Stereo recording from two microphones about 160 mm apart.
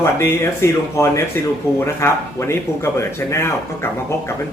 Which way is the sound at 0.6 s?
15° left (ahead or behind).